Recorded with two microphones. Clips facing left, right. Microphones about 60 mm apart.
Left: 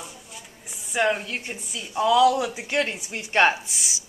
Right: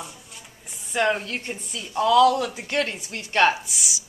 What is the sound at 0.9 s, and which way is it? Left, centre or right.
A woman's voice, centre.